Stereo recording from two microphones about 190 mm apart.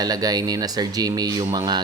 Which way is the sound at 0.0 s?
20° right (ahead or behind).